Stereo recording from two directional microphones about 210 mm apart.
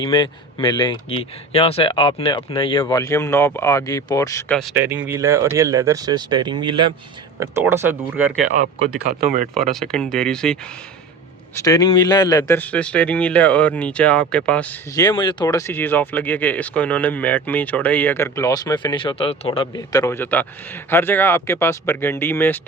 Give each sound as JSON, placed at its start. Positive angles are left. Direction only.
{"t": 0.0, "sound": "speech", "side_deg": 25}
{"t": 4.7, "sound": "speech", "side_deg": -10}
{"t": 7.3, "sound": "speech", "side_deg": -10}
{"t": 9.6, "sound": "speech", "side_deg": 0}
{"t": 11.5, "sound": "speech", "side_deg": 15}
{"t": 14.9, "sound": "speech", "side_deg": 20}